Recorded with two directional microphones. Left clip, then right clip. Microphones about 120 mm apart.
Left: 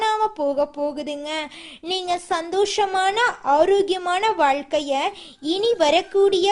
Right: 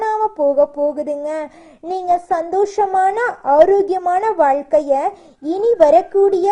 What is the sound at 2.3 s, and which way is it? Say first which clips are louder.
Speech: right 4 dB; 50° left (ahead or behind).